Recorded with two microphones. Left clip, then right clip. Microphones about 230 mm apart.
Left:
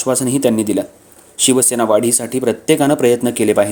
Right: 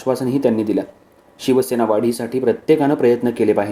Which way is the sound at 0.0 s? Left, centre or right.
Left.